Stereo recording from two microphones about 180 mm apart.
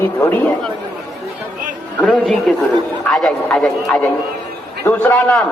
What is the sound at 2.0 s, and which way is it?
A man's voice, 5° left (ahead or behind).